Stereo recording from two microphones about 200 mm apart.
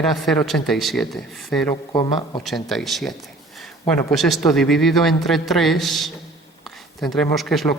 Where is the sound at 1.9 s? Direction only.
20° left (ahead or behind).